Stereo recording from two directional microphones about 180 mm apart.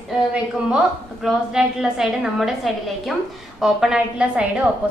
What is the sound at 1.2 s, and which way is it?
A woman's voice, 5° right (ahead or behind).